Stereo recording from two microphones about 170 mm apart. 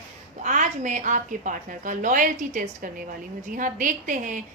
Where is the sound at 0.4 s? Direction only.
45° right (ahead or behind).